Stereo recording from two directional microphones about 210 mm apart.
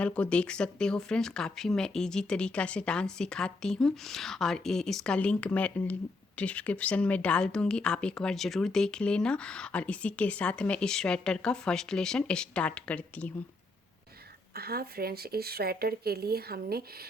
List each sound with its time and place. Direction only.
0.0 s speech: 5° left (ahead or behind)
14.5 s speech: 45° right (ahead or behind)